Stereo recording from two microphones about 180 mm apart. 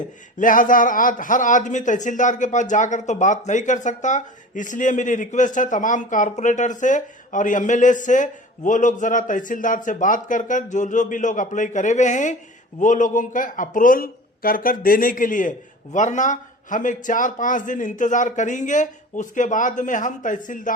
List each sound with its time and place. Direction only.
0.3 s a man's voice: 50° left (ahead or behind)